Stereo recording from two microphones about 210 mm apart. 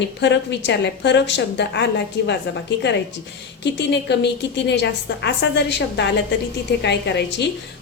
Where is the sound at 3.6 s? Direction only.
55° left (ahead or behind).